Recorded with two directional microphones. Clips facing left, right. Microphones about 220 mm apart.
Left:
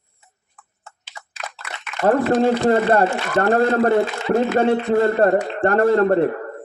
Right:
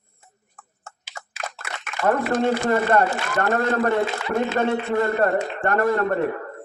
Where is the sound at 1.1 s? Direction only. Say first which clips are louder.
Right 1 dB; 45° right (ahead or behind).